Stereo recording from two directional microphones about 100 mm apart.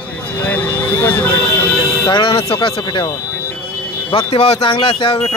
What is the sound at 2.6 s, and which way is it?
Speech, 60° left (ahead or behind).